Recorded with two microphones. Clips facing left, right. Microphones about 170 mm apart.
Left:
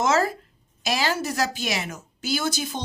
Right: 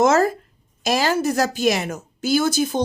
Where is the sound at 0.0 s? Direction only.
45° right (ahead or behind).